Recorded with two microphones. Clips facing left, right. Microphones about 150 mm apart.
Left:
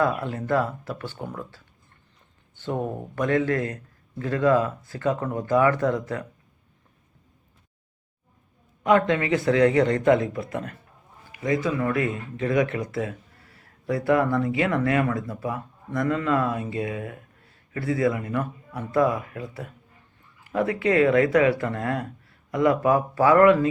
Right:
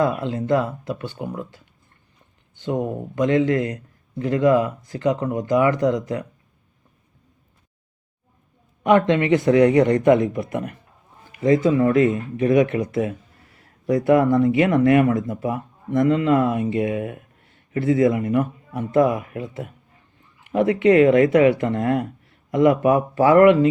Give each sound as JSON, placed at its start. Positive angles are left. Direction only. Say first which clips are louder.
{"t": 0.0, "sound": "speech", "louder": "right 3 dB", "side_deg": -20}
{"t": 8.8, "sound": "speech", "louder": "right 4 dB", "side_deg": -20}